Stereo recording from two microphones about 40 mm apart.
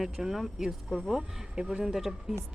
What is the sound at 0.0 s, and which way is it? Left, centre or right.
Speech, centre.